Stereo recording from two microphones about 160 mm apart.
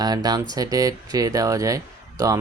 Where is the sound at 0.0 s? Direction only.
25° right (ahead or behind).